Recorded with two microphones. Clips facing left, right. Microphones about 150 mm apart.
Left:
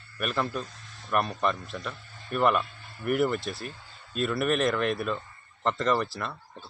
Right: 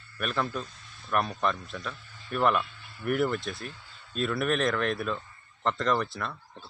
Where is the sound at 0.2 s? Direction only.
5° left (ahead or behind).